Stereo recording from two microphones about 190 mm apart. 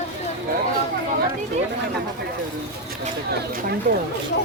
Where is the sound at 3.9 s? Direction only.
55° right (ahead or behind).